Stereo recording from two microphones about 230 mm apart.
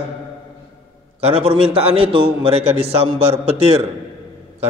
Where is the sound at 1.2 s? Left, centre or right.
Right.